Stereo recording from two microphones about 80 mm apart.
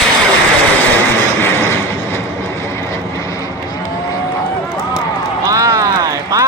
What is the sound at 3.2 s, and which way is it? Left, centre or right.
Vehicle, left.